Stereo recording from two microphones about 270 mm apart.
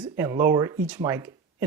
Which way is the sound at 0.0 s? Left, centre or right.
Centre.